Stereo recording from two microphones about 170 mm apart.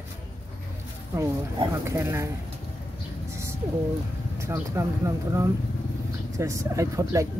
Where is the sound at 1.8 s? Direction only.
15° right (ahead or behind).